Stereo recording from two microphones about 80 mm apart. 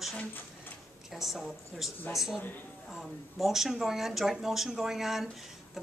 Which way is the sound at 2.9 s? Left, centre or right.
Centre.